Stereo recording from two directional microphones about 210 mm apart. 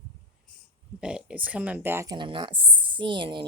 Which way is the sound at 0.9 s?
5° right (ahead or behind).